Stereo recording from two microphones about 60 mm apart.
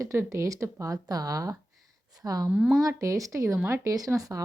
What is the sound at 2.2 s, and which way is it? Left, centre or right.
Speech, right.